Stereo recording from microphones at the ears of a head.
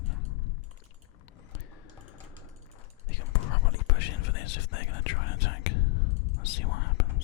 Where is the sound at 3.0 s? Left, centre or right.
Left.